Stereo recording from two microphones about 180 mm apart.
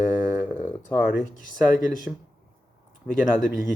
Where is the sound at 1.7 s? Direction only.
45° left (ahead or behind).